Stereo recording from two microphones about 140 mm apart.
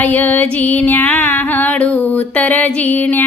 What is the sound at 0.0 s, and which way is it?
Music, 15° left (ahead or behind).